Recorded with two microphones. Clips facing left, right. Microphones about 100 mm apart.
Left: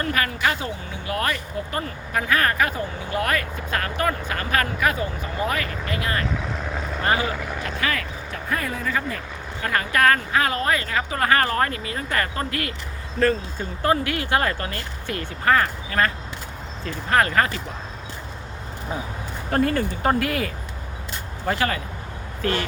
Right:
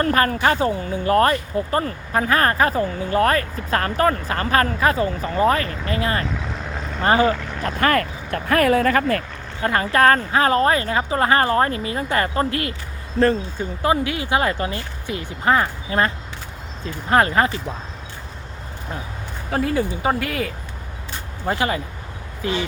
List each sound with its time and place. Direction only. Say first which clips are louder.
0.0 s speech: right 6 dB; 40° right (ahead or behind)
6.2 s vehicle: even; centre (ahead or behind)
7.0 s speech: right 6 dB; 35° right (ahead or behind)
7.3 s speech: left 1 dB; 5° left (ahead or behind)
7.8 s speech: right 10 dB; 50° right (ahead or behind)
8.4 s speech: right 11 dB; 70° right (ahead or behind)
9.6 s speech: right 4 dB; 30° right (ahead or behind)
13.6 s speech: right 2 dB; 15° right (ahead or behind)
19.5 s speech: even; centre (ahead or behind)
21.4 s speech: right 2 dB; 20° right (ahead or behind)